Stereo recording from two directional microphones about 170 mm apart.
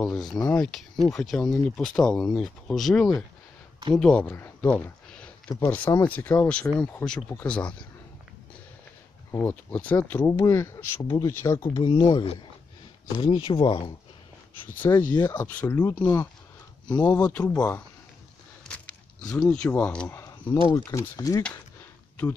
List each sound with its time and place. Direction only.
0.0 s speech: centre (ahead or behind)
9.3 s speech: 15° left (ahead or behind)
11.6 s speech: 30° left (ahead or behind)
14.8 s speech: 15° left (ahead or behind)
16.0 s speech: 25° left (ahead or behind)
17.2 s speech: 5° left (ahead or behind)
18.7 s a sound: 5° left (ahead or behind)
20.7 s speech: 15° left (ahead or behind)